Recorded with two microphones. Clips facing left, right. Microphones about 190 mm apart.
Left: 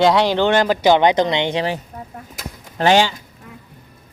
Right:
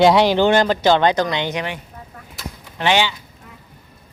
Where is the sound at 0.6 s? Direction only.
10° left (ahead or behind); by 1.8 s 30° left (ahead or behind).